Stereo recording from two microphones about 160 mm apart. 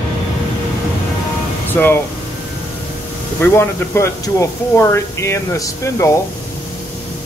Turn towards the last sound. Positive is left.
turn(degrees=20)  # may be behind; listen again after turning